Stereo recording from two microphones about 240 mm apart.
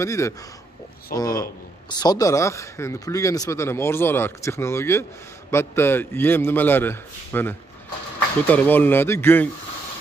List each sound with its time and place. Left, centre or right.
0.0 s speech: centre